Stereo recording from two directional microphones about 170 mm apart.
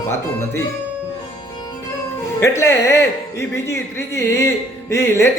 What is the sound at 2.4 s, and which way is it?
A man's voice, 15° left (ahead or behind).